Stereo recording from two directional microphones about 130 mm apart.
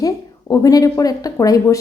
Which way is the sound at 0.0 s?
25° left (ahead or behind).